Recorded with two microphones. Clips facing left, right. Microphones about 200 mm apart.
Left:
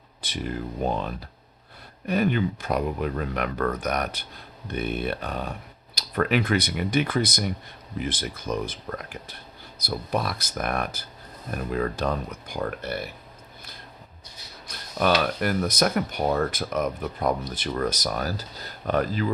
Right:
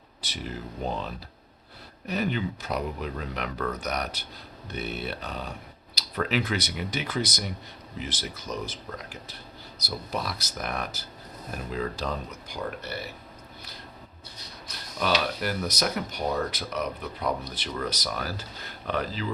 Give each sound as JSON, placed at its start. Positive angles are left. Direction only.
{"t": 0.2, "sound": "speech", "side_deg": 55}
{"t": 2.0, "sound": "speech", "side_deg": 55}
{"t": 14.9, "sound": "speech", "side_deg": 55}